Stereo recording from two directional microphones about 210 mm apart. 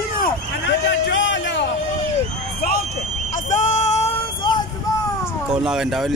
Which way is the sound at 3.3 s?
35° left (ahead or behind).